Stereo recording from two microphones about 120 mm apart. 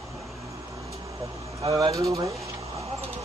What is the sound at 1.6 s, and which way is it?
Speech, 35° right (ahead or behind).